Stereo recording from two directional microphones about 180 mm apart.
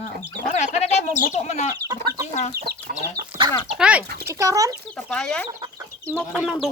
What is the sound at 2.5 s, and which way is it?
Chicken, 60° right (ahead or behind).